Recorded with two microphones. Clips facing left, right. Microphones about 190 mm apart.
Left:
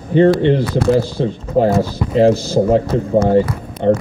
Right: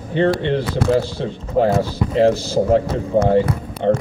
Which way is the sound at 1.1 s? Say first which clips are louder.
Left 3 dB; 40° left (ahead or behind).